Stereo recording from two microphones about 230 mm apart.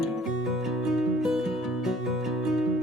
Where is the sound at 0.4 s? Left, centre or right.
Centre.